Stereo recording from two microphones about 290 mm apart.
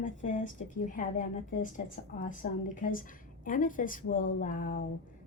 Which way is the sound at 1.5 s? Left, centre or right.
Left.